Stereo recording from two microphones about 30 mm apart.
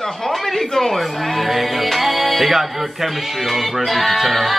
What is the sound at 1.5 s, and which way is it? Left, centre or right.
Music, centre.